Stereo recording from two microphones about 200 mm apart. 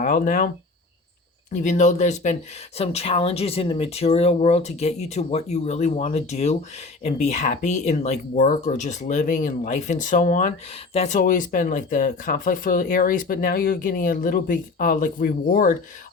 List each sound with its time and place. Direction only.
0.0 s speech: 40° left (ahead or behind)
1.5 s speech: 35° left (ahead or behind)